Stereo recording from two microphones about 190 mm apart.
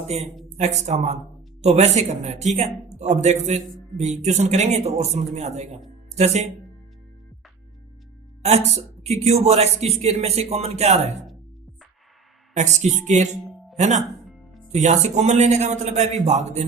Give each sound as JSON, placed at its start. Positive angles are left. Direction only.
{"t": 0.5, "sound": "speech", "side_deg": -35}
{"t": 8.4, "sound": "speech", "side_deg": -35}
{"t": 12.5, "sound": "speech", "side_deg": -40}